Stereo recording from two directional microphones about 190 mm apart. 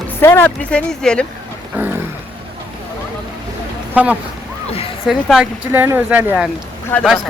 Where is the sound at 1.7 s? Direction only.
10° right (ahead or behind).